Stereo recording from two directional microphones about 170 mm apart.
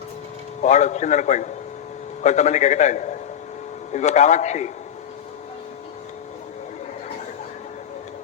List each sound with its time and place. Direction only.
0.6 s a man's voice: 45° left (ahead or behind)